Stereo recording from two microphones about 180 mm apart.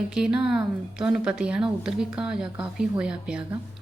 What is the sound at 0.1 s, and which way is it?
A woman's voice, 5° right (ahead or behind).